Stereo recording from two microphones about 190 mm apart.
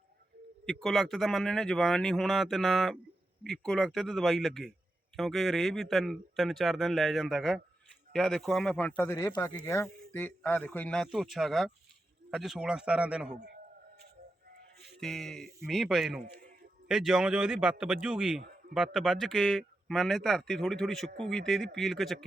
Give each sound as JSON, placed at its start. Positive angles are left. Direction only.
{"t": 0.6, "sound": "speech", "side_deg": 0}
{"t": 14.8, "sound": "speech", "side_deg": 0}
{"t": 16.2, "sound": "a sound", "side_deg": -50}
{"t": 16.9, "sound": "speech", "side_deg": 0}